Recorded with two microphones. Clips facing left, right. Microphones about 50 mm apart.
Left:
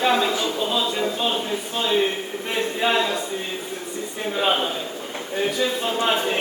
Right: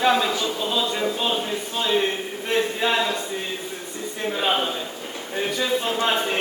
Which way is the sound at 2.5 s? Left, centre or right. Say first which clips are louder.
Right 1 dB; centre.